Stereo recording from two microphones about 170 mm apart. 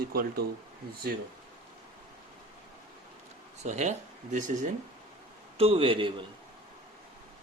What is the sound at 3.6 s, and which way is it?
Speech, 45° right (ahead or behind).